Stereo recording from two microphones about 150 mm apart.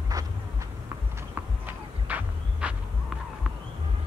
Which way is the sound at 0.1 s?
25° right (ahead or behind).